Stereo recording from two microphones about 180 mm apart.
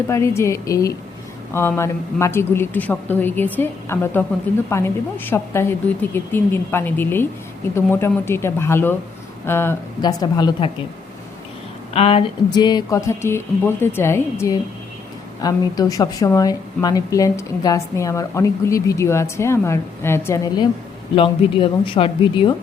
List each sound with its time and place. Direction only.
0.1 s a woman's voice: 15° left (ahead or behind)
11.9 s a woman's voice: 35° left (ahead or behind); by 20.7 s 15° left (ahead or behind)
21.2 s speech: 30° left (ahead or behind)